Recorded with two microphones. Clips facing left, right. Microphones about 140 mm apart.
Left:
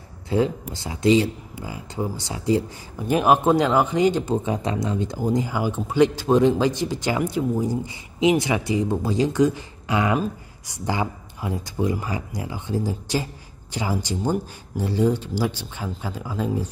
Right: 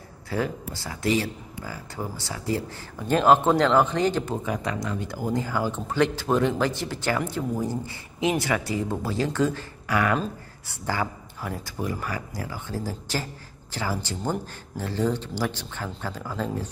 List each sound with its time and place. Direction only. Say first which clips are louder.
0.3 s speech: left 6 dB; 20° left (ahead or behind)